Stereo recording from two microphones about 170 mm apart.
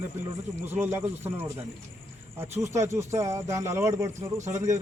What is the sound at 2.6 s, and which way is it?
A man's voice, 15° right (ahead or behind).